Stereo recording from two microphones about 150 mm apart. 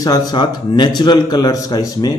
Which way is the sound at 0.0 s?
25° left (ahead or behind).